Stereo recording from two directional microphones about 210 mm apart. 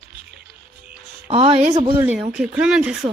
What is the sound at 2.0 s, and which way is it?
Speech, 5° right (ahead or behind).